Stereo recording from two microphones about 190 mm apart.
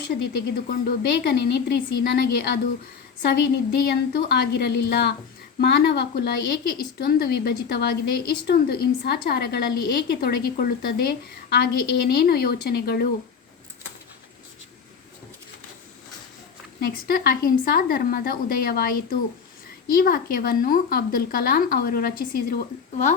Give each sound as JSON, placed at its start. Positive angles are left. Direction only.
{"t": 0.2, "sound": "a woman's voice", "side_deg": 55}
{"t": 16.8, "sound": "speech", "side_deg": 50}